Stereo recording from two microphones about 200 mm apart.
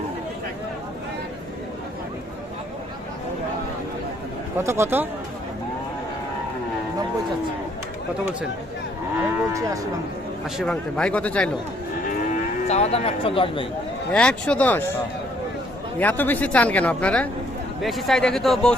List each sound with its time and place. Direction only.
4.5 s speech: 15° right (ahead or behind)
10.6 s a man's voice: 5° left (ahead or behind)
12.3 s moo: 35° left (ahead or behind)
14.1 s a man's voice: 5° left (ahead or behind)
16.0 s a man's voice: 10° left (ahead or behind)